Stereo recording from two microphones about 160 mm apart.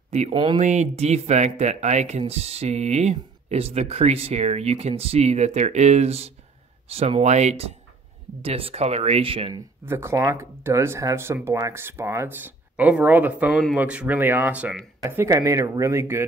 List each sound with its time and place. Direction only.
0.3 s speech: 30° right (ahead or behind)
0.6 s speech: 45° right (ahead or behind)
9.5 s speech: 15° right (ahead or behind)
15.0 s speech: 15° right (ahead or behind)